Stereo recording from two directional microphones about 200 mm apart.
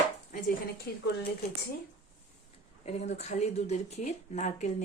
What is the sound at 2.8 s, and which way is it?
Speech, 35° left (ahead or behind).